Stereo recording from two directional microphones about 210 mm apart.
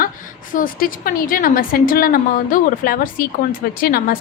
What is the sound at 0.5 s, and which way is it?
A woman's voice, 40° left (ahead or behind).